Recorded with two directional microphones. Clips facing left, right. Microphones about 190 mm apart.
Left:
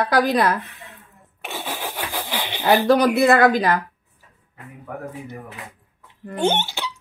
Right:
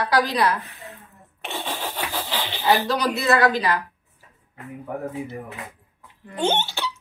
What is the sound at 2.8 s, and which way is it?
Speech, 55° left (ahead or behind).